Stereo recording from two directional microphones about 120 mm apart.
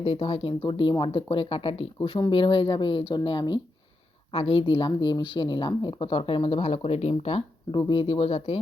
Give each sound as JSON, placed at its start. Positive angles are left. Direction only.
{"t": 0.0, "sound": "speech", "side_deg": 50}
{"t": 7.7, "sound": "speech", "side_deg": 40}